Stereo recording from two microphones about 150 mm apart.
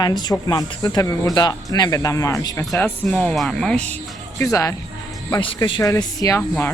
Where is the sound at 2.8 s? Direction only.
10° left (ahead or behind).